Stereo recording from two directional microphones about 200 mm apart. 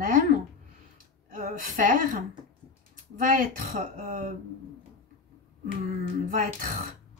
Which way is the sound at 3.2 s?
45° right (ahead or behind).